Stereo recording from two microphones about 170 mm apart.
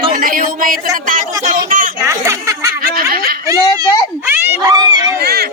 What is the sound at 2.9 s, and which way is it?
Snicker, 60° right (ahead or behind).